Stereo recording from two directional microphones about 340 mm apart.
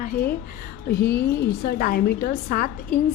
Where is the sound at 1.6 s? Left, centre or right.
Left.